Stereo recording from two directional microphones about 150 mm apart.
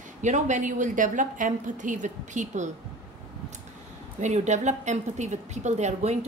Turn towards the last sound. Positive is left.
turn(degrees=-50)  # may be behind; listen again after turning